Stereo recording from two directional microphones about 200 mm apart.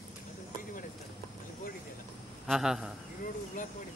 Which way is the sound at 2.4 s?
Centre (ahead or behind).